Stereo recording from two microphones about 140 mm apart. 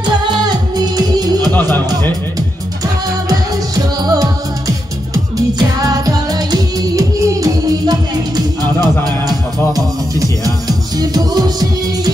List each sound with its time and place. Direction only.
0.0 s music: 30° right (ahead or behind)
1.5 s speech: 15° left (ahead or behind)
3.3 s music: 25° right (ahead or behind)
9.8 s speech: 25° right (ahead or behind)